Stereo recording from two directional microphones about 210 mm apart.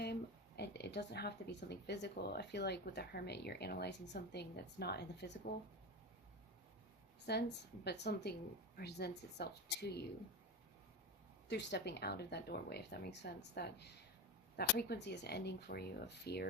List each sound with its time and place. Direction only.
0.0 s speech: 50° left (ahead or behind)
7.3 s speech: 50° left (ahead or behind)
11.4 s speech: 55° left (ahead or behind)